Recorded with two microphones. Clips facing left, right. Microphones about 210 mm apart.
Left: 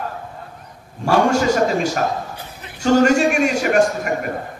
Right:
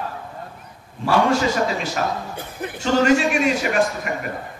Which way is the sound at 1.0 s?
45° left (ahead or behind).